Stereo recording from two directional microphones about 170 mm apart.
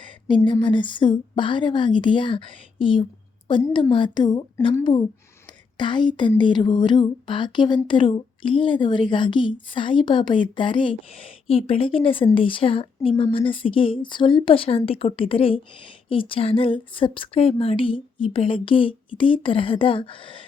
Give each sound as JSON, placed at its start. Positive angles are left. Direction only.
{"t": 0.0, "sound": "a woman's voice", "side_deg": 30}